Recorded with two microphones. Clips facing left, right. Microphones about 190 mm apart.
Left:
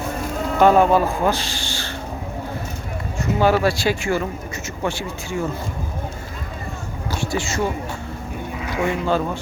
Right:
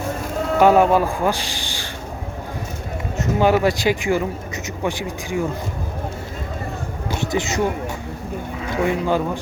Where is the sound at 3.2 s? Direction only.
15° right (ahead or behind).